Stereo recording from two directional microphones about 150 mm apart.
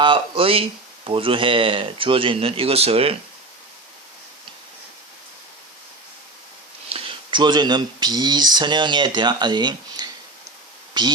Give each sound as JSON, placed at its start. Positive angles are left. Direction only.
{"t": 0.0, "sound": "speech", "side_deg": -35}
{"t": 6.9, "sound": "speech", "side_deg": -35}